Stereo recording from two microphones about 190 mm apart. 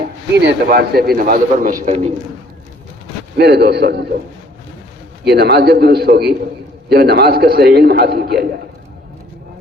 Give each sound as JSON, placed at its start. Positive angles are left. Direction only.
{"t": 0.3, "sound": "a man's voice", "side_deg": -60}
{"t": 3.3, "sound": "a man's voice", "side_deg": -60}
{"t": 5.2, "sound": "a man's voice", "side_deg": -60}